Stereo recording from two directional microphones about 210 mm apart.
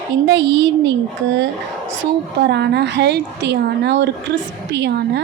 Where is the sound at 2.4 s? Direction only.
50° right (ahead or behind).